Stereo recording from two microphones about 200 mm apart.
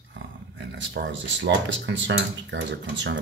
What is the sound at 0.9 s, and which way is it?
Speech, 65° right (ahead or behind).